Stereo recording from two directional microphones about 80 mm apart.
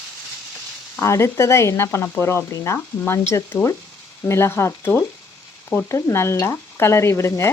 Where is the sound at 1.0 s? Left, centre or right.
Left.